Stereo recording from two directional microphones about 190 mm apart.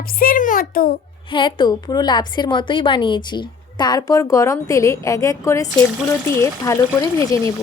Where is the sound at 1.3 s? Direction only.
25° left (ahead or behind).